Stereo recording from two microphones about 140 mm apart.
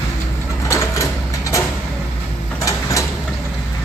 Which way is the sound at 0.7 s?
20° left (ahead or behind).